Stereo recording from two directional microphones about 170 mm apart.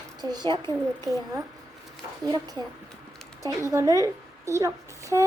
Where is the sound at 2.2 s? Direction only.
20° right (ahead or behind).